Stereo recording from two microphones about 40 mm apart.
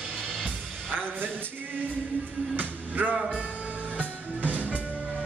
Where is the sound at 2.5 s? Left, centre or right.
Right.